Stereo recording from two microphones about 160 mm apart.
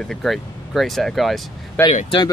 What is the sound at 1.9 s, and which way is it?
Speech, 35° left (ahead or behind).